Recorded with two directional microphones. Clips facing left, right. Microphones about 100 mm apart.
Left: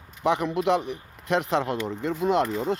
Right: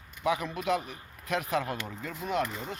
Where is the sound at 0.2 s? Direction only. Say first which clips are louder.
Left 6 dB; 20° left (ahead or behind).